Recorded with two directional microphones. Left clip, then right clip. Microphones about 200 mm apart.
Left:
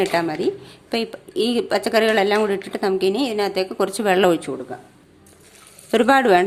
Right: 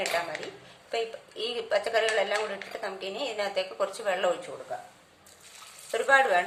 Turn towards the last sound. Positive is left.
turn(degrees=50)  # may be behind; listen again after turning